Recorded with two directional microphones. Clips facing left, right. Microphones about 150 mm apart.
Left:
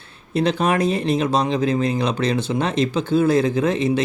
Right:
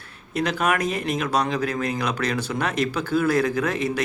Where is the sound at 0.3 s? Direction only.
30° left (ahead or behind).